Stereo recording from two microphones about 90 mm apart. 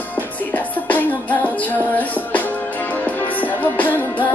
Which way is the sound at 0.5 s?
20° left (ahead or behind).